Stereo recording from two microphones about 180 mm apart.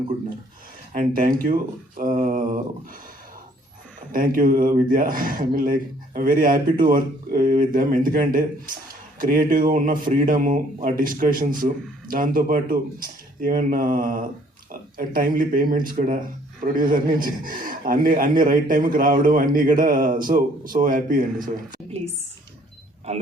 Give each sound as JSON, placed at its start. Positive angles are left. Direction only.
{"t": 0.9, "sound": "speech", "side_deg": -50}
{"t": 4.1, "sound": "speech", "side_deg": -50}
{"t": 23.1, "sound": "speech", "side_deg": -40}